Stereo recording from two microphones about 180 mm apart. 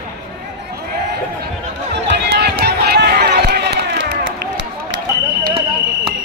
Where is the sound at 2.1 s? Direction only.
65° right (ahead or behind).